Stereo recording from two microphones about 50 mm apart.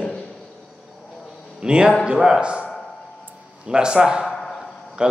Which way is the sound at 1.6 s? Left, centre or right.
Centre.